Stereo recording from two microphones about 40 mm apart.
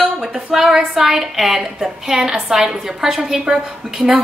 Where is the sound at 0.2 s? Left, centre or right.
Centre.